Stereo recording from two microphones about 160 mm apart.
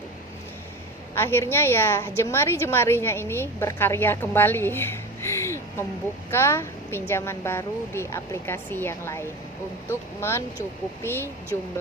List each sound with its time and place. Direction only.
1.1 s a woman's voice: 15° left (ahead or behind)